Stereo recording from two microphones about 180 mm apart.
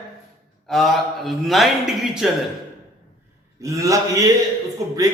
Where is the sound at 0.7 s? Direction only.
Centre (ahead or behind).